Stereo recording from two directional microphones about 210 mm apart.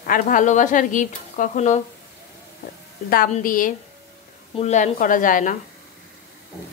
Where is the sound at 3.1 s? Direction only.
40° left (ahead or behind).